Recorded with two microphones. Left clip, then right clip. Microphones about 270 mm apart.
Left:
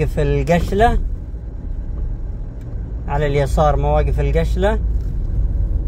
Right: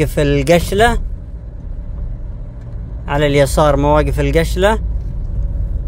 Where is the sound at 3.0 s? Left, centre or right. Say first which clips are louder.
Right 6 dB; right.